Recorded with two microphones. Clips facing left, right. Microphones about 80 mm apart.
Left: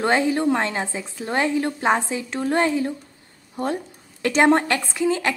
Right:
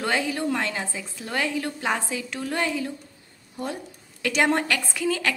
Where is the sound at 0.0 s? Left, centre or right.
Left.